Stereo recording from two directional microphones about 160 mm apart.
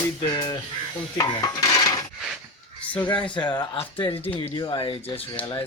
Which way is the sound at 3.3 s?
30° left (ahead or behind).